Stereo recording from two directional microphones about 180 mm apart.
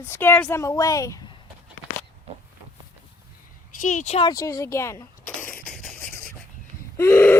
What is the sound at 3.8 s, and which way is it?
Speech, 45° left (ahead or behind).